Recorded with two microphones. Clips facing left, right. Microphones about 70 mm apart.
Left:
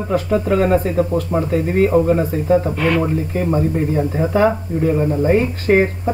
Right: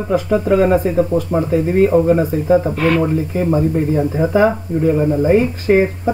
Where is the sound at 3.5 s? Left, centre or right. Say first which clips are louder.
Right 2 dB; centre.